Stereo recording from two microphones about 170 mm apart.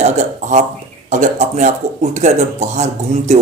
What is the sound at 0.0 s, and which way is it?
Speech, 40° right (ahead or behind).